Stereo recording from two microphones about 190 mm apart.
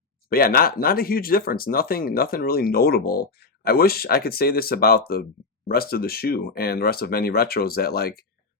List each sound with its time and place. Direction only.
0.3 s speech: 50° left (ahead or behind)